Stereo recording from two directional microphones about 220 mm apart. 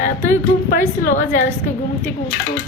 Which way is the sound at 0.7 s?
40° left (ahead or behind).